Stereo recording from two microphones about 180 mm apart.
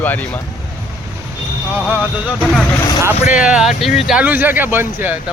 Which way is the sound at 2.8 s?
15° left (ahead or behind).